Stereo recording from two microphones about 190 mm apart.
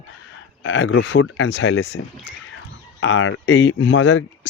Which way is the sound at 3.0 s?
80° left.